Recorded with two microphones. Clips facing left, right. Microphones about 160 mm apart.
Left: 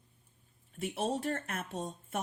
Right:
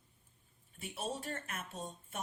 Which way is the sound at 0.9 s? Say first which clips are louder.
Left 7 dB; 75° left (ahead or behind).